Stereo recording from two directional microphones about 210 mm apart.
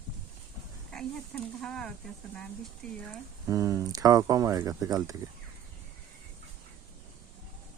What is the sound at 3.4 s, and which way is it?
Speech, 15° right (ahead or behind).